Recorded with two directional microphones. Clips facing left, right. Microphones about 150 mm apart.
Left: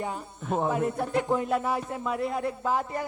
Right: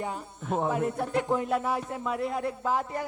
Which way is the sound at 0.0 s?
20° left (ahead or behind).